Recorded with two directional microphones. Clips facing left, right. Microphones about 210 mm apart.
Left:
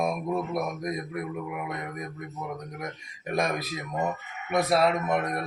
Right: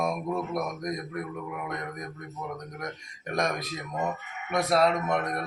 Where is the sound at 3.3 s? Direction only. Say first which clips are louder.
Left 1 dB; 5° left (ahead or behind).